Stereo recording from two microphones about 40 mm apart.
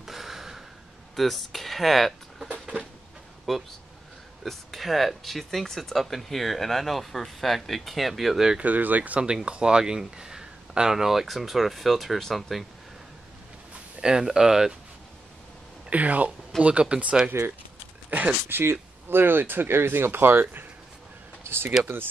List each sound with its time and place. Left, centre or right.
0.0 s a sound: centre
1.1 s speech: centre
3.5 s speech: centre
8.5 s speech: right
9.2 s speech: right; by 12.6 s centre
14.0 s speech: centre
15.9 s speech: right
16.5 s speech: centre
16.9 s speech: right
17.3 s speech: right
18.1 s speech: right
18.5 s speech: right
21.5 s speech: right